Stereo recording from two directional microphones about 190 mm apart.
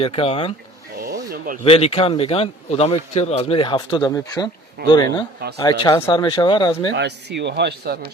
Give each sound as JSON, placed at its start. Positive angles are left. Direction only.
{"t": 0.0, "sound": "speech", "side_deg": 30}
{"t": 1.0, "sound": "a sound", "side_deg": -50}
{"t": 1.6, "sound": "a man's voice", "side_deg": 30}
{"t": 6.9, "sound": "speech", "side_deg": -65}